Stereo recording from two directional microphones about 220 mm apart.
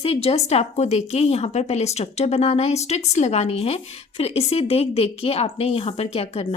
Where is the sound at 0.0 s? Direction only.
25° left (ahead or behind).